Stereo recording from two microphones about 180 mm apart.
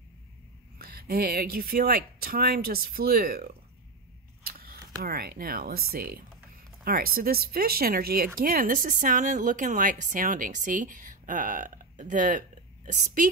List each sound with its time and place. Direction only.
0.7 s speech: 55° right (ahead or behind)
4.4 s a sound: 55° right (ahead or behind)
5.0 s a woman's voice: 60° right (ahead or behind)